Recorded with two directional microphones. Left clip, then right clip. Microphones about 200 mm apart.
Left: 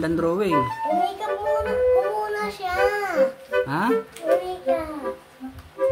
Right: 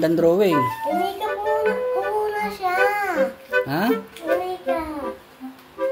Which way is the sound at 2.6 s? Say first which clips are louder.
Right 3 dB; 15° left (ahead or behind).